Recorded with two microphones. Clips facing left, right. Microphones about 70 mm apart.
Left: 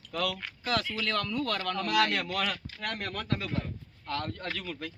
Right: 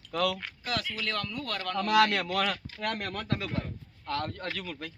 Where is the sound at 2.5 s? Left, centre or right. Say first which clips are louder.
Right 3 dB; right.